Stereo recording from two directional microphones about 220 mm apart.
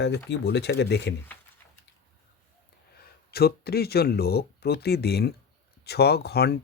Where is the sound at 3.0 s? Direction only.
45° left (ahead or behind).